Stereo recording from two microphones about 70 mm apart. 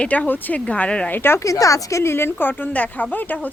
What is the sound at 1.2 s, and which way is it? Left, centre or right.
Speech, left.